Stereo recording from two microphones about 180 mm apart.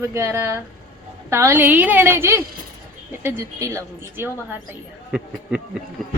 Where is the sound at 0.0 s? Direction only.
15° right (ahead or behind).